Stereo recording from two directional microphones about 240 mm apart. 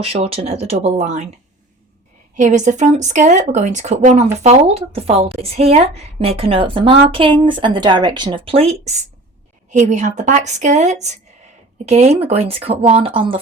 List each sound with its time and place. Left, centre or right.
0.0 s a woman's voice: right
2.3 s a woman's voice: right